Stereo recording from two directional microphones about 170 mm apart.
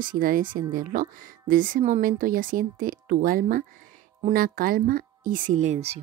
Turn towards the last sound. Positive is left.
turn(degrees=-40)  # may be behind; listen again after turning